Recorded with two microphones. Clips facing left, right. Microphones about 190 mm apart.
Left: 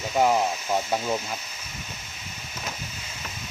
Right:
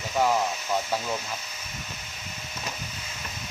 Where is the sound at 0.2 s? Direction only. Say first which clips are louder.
Left 3 dB; 20° left (ahead or behind).